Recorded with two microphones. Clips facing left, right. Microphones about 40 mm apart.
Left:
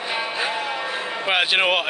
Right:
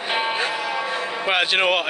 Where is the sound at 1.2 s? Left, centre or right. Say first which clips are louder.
Even; centre.